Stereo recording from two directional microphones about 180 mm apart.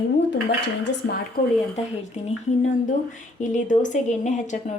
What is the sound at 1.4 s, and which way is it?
Speech, 50° left (ahead or behind).